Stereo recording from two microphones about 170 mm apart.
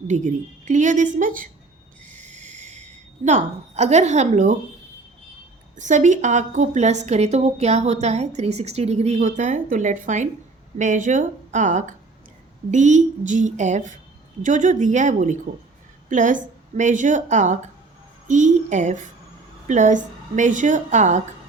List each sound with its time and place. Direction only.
0.1 s a woman's voice: 45° right (ahead or behind)
2.0 s a sound: 45° right (ahead or behind)
5.7 s a woman's voice: 45° right (ahead or behind)